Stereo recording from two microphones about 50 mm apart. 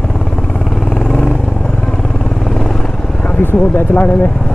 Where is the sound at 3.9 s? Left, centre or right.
Left.